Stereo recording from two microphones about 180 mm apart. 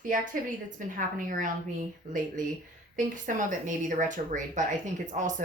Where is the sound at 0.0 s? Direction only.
50° right (ahead or behind).